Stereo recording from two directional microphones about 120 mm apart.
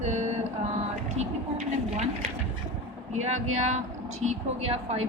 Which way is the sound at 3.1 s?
70° right (ahead or behind).